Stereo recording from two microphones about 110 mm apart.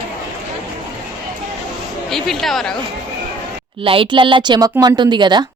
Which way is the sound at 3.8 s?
55° right (ahead or behind).